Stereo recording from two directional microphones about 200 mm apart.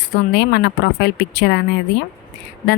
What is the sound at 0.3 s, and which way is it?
Speech, 60° left (ahead or behind).